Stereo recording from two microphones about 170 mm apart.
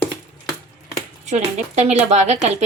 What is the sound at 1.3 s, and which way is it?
A woman's voice, 40° right (ahead or behind).